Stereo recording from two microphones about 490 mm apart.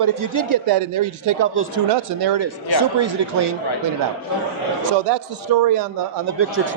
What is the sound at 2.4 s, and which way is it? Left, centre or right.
Speech, right.